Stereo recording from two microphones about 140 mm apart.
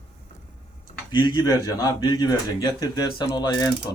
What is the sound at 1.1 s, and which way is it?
Mechanisms, 30° left (ahead or behind).